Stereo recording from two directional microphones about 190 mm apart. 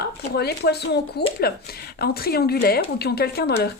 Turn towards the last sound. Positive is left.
turn(degrees=55)  # may be behind; listen again after turning